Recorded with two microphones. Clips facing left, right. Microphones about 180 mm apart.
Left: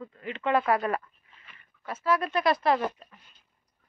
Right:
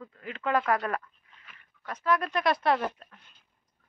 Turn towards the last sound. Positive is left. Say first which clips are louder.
# left 2 dB
turn(degrees=5)  # may be behind; listen again after turning